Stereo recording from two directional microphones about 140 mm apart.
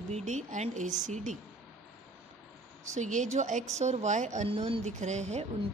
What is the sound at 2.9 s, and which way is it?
Speech, 60° right (ahead or behind).